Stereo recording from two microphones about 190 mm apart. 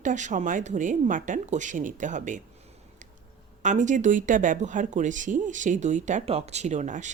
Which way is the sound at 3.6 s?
40° right (ahead or behind).